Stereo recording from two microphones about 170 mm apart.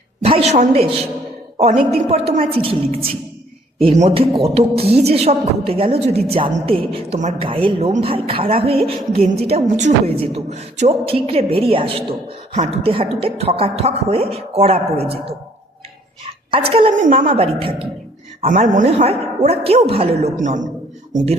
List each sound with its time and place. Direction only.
0.2 s a woman's voice: 35° right (ahead or behind)
16.5 s a woman's voice: 35° right (ahead or behind)
18.4 s a woman's voice: 45° right (ahead or behind)
20.3 s a man's voice: 45° right (ahead or behind)